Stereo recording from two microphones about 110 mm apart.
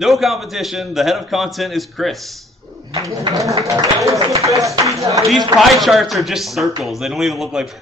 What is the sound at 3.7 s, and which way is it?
Speech, 30° right (ahead or behind).